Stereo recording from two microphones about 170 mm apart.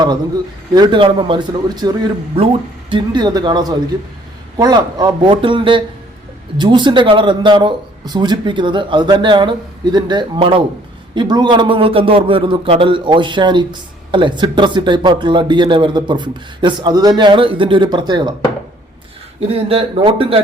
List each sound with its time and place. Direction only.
0.7 s a man's voice: 25° right (ahead or behind)
19.4 s speech: 35° right (ahead or behind)